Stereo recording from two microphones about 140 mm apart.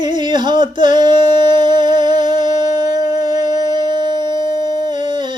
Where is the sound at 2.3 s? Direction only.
30° right (ahead or behind).